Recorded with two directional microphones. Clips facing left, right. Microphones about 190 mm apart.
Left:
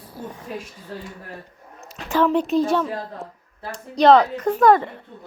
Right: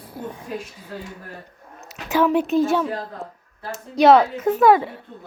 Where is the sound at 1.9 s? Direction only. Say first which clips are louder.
Right 1 dB; 5° right (ahead or behind).